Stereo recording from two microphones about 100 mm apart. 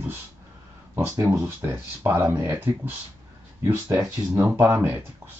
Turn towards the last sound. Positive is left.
turn(degrees=-20)  # may be behind; listen again after turning